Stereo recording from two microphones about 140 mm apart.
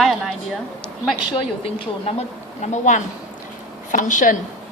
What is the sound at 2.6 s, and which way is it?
Speech, 60° left (ahead or behind).